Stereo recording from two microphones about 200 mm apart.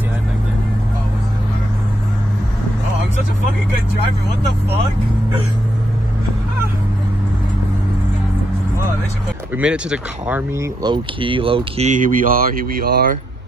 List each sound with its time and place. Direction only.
9.6 s speech: 5° right (ahead or behind)
10.8 s speech: 25° right (ahead or behind); by 13.2 s 45° right (ahead or behind)